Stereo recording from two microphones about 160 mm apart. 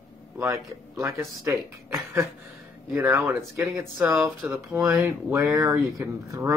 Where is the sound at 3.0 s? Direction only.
15° right (ahead or behind).